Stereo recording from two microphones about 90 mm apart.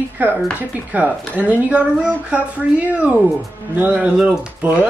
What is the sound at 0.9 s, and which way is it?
A woman's voice, 15° right (ahead or behind).